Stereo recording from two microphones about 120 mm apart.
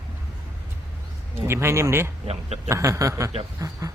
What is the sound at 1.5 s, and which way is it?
Speech, 20° right (ahead or behind).